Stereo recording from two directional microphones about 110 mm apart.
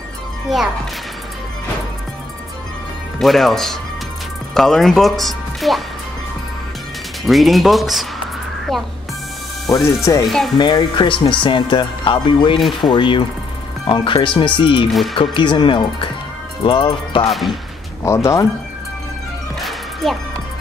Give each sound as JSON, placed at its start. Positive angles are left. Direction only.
{"t": 3.2, "sound": "speech", "side_deg": 0}
{"t": 7.2, "sound": "speech", "side_deg": 0}
{"t": 9.7, "sound": "speech", "side_deg": 25}
{"t": 10.2, "sound": "speech", "side_deg": 0}
{"t": 10.6, "sound": "speech", "side_deg": 45}
{"t": 14.9, "sound": "speech", "side_deg": 0}
{"t": 15.1, "sound": "speech", "side_deg": 45}
{"t": 17.3, "sound": "speech", "side_deg": 0}
{"t": 18.0, "sound": "speech", "side_deg": 25}
{"t": 19.6, "sound": "music", "side_deg": 0}